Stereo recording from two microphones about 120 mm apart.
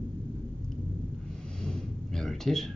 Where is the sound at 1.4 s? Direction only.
5° left (ahead or behind).